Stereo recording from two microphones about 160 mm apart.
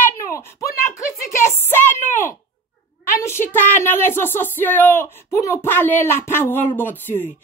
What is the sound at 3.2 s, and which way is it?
Speech, 15° left (ahead or behind).